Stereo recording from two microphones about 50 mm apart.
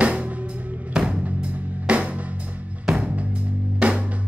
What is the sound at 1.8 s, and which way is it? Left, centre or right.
Music, right.